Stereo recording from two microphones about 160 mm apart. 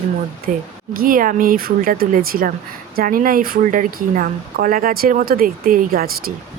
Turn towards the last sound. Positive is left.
turn(degrees=-70)  # may be behind; listen again after turning